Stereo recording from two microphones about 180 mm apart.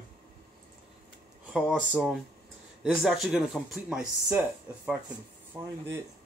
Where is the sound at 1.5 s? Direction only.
Centre (ahead or behind).